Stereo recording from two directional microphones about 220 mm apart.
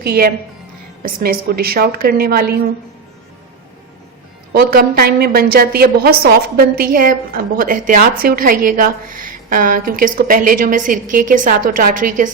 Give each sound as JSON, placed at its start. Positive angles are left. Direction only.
{"t": 0.0, "sound": "a woman's voice", "side_deg": -45}
{"t": 4.5, "sound": "a woman's voice", "side_deg": -45}